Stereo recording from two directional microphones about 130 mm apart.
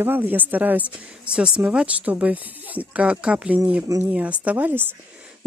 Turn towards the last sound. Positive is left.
turn(degrees=-15)  # may be behind; listen again after turning